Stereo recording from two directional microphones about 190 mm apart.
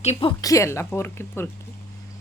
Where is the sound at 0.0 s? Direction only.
30° left (ahead or behind); by 1.5 s 10° left (ahead or behind).